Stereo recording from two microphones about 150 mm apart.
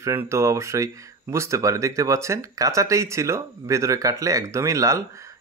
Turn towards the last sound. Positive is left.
turn(degrees=-20)  # may be behind; listen again after turning